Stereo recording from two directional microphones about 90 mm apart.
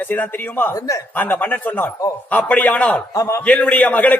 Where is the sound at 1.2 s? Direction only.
20° left (ahead or behind).